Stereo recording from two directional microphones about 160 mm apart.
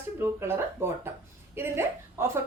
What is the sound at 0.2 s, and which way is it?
A woman's voice, 15° right (ahead or behind).